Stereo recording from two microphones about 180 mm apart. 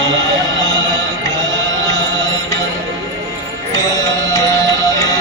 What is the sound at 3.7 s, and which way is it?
Music, 20° left (ahead or behind).